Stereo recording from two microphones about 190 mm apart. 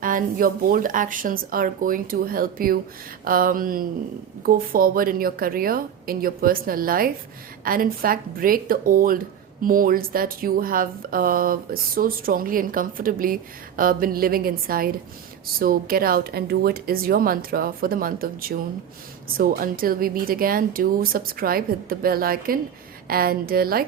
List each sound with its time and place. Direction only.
0.0 s a woman's voice: 45° right (ahead or behind)